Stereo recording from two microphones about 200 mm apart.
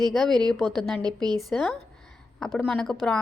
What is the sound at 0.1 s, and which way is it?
Speech, centre (ahead or behind).